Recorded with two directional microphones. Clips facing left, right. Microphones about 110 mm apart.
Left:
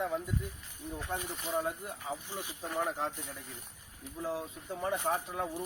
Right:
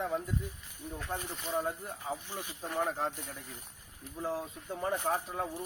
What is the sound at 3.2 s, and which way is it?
A man's voice, centre (ahead or behind).